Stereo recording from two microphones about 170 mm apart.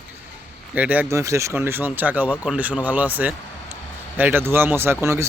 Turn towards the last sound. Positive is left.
turn(degrees=-15)  # may be behind; listen again after turning